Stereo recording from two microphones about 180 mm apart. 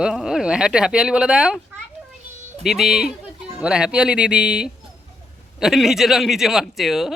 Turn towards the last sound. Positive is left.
turn(degrees=0)  # may be behind; listen again after turning